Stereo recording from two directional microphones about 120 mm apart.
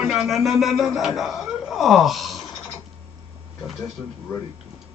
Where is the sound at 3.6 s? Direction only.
Centre (ahead or behind).